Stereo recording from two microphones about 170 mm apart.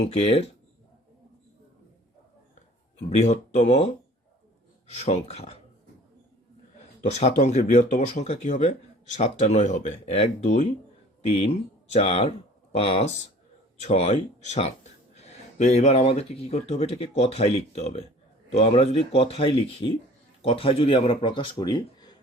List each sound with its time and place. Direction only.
0.0 s speech: 35° left (ahead or behind)
3.5 s speech: 40° left (ahead or behind)
7.2 s speech: 45° left (ahead or behind); by 22.2 s 25° left (ahead or behind)